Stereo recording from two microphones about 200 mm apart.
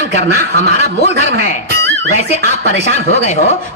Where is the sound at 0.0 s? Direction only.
35° left (ahead or behind).